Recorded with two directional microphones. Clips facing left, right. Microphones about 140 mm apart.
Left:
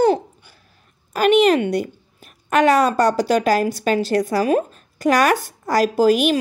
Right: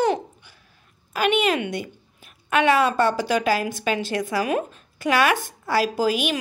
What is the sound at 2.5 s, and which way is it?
A woman's voice, 40° left (ahead or behind).